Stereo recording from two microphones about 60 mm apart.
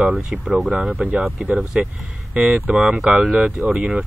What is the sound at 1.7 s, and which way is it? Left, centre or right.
Speech, centre.